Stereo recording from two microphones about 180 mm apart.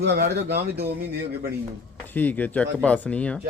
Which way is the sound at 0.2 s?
65° right (ahead or behind).